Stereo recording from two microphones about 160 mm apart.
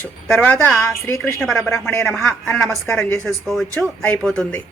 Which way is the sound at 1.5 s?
5° left (ahead or behind).